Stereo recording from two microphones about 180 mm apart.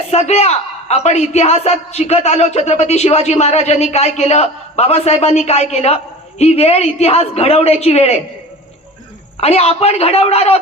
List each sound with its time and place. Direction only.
0.1 s a man's voice: 35° left (ahead or behind)
9.4 s a man's voice: 35° left (ahead or behind)